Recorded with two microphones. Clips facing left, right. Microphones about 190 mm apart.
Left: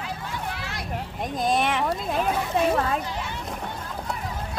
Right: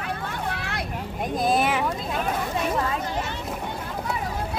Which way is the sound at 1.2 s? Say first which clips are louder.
Right 2 dB; 5° right (ahead or behind).